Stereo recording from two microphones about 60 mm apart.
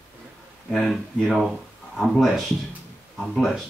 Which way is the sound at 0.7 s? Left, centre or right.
Centre.